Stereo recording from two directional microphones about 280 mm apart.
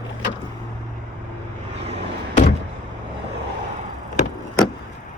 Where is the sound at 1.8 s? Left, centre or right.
Right.